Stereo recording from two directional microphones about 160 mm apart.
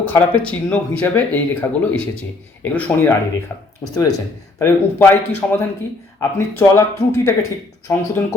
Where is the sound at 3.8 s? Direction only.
20° left (ahead or behind).